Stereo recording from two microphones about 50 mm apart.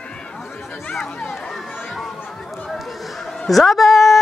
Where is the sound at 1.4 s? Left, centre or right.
Centre.